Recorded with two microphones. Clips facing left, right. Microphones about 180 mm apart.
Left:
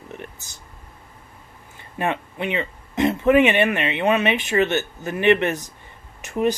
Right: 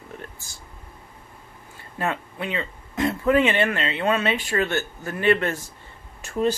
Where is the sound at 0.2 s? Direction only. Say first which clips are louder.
Left 2 dB; 20° left (ahead or behind).